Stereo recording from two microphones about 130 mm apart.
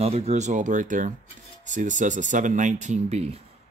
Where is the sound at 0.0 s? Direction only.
55° right (ahead or behind).